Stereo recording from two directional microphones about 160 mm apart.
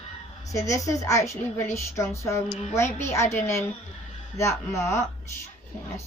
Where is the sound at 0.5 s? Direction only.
20° left (ahead or behind).